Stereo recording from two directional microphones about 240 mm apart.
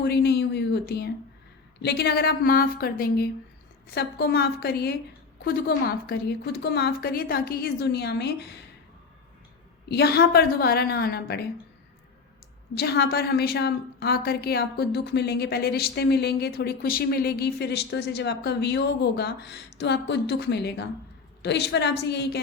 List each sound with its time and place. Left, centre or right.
0.0 s a woman's voice: left
9.9 s a woman's voice: left
12.7 s a woman's voice: left